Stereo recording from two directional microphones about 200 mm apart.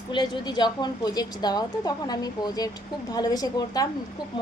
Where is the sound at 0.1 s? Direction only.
20° left (ahead or behind).